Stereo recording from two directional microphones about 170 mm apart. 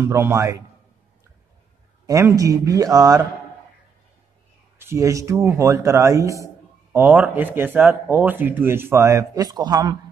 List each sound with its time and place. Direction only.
0.0 s a man's voice: 15° right (ahead or behind)
2.0 s speech: 20° right (ahead or behind)
4.7 s a man's voice: 15° right (ahead or behind)